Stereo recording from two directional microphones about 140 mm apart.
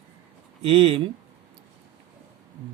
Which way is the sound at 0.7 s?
40° right (ahead or behind).